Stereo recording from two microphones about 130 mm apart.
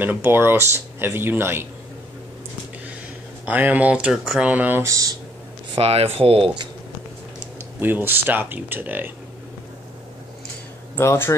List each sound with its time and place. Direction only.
0.0 s speech: 15° right (ahead or behind)
3.4 s speech: 15° right (ahead or behind)
5.8 s speech: 50° right (ahead or behind)
7.8 s speech: 15° right (ahead or behind)
11.0 s speech: 20° left (ahead or behind)